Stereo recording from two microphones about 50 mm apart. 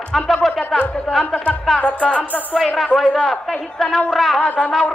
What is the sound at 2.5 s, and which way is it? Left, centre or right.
Speech, centre.